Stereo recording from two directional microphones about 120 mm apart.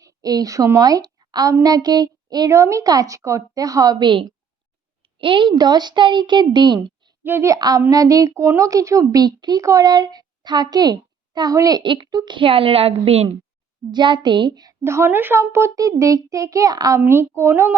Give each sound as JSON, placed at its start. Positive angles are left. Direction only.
{"t": 0.0, "sound": "a woman's voice", "side_deg": -30}
{"t": 7.3, "sound": "speech", "side_deg": -20}
{"t": 11.8, "sound": "a woman's voice", "side_deg": -40}
{"t": 13.9, "sound": "a woman's voice", "side_deg": -40}
{"t": 14.8, "sound": "speech", "side_deg": -20}